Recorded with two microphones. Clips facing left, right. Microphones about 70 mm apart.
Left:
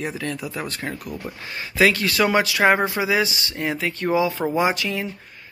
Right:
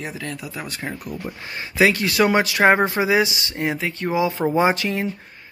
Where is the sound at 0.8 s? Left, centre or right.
Right.